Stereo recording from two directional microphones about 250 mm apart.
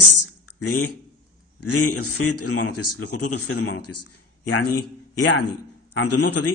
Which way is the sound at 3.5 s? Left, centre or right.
Left.